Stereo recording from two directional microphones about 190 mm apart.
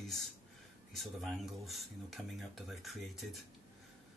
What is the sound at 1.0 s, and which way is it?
Speech, centre (ahead or behind).